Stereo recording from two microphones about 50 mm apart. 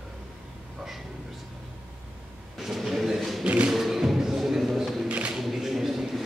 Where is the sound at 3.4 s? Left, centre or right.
Right.